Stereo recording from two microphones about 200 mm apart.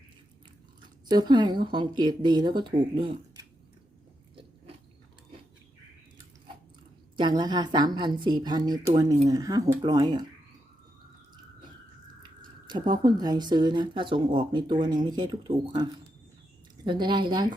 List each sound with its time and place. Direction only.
1.0 s speech: 20° right (ahead or behind)
7.2 s speech: 20° right (ahead or behind)
12.2 s speech: 20° right (ahead or behind)